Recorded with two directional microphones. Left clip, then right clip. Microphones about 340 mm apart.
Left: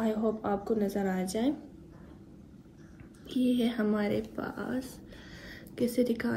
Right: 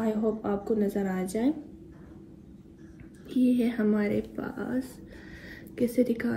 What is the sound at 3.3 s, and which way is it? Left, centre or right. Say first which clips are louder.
A woman's voice: right 3 dB; centre.